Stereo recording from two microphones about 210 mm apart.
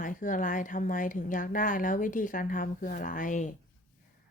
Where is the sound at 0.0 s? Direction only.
40° left (ahead or behind).